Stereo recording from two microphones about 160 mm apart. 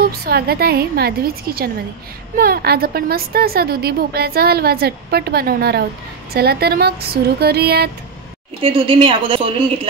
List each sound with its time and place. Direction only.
0.0 s a woman's voice: 70° right (ahead or behind)
8.6 s a woman's voice: 35° right (ahead or behind)